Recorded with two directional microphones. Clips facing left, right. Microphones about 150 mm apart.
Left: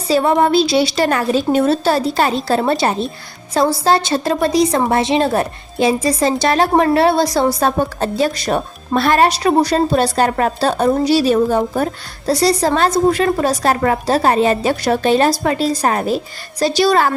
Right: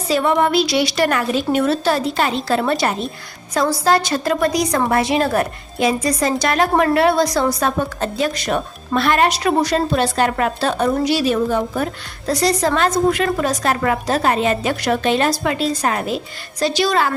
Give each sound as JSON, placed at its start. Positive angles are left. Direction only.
{"t": 0.1, "sound": "a woman's voice", "side_deg": 35}